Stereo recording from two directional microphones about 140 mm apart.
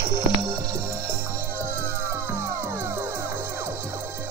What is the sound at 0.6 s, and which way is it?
Music, 25° right (ahead or behind).